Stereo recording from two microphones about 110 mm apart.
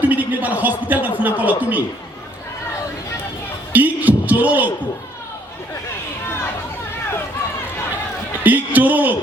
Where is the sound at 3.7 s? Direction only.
15° right (ahead or behind).